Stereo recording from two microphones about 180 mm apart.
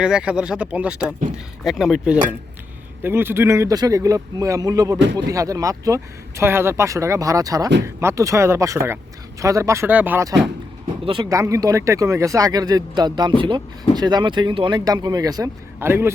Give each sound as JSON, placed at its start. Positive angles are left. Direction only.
{"t": 0.0, "sound": "speech", "side_deg": -5}
{"t": 11.0, "sound": "speech", "side_deg": -25}